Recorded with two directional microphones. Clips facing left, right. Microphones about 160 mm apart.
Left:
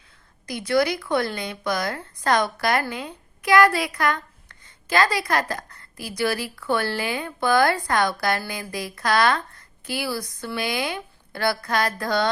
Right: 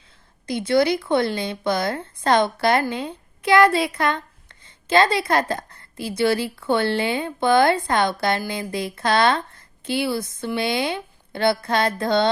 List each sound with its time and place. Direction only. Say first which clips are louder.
0.4 s a woman's voice: right 3 dB; 25° right (ahead or behind)